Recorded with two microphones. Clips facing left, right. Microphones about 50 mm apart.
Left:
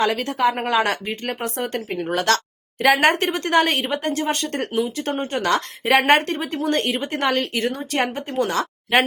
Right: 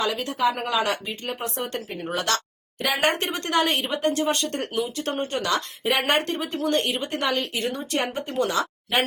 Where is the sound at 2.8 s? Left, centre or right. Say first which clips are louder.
Left 7 dB; left.